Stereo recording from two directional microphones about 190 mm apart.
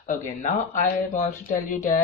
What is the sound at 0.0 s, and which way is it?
Speech, 40° left (ahead or behind).